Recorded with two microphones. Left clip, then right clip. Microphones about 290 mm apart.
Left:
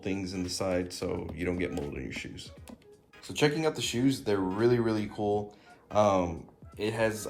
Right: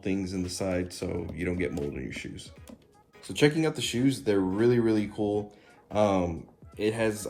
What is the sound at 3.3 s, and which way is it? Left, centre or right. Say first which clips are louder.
Speech: right 2 dB; centre.